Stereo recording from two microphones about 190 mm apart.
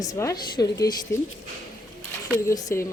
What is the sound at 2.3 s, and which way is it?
Speech, 20° left (ahead or behind).